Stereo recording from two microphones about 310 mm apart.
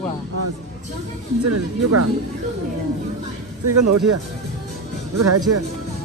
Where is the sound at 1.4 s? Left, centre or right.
Right.